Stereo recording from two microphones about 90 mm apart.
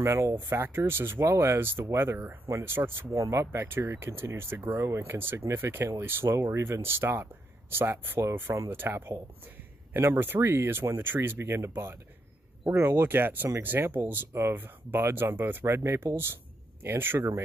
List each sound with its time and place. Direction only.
0.0 s speech: 30° right (ahead or behind)